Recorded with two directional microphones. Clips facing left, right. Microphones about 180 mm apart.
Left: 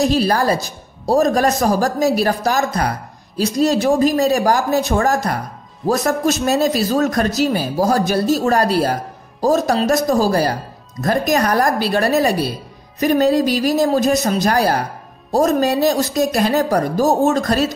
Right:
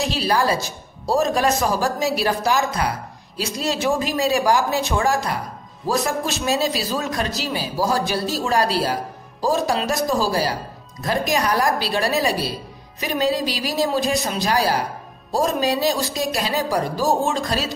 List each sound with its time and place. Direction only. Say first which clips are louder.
0.0 s a man's voice: left 5 dB; 45° left (ahead or behind)